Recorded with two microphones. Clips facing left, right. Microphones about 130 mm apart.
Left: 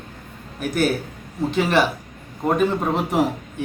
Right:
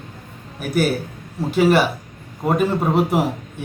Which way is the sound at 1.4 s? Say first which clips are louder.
Right 3 dB; 5° right (ahead or behind).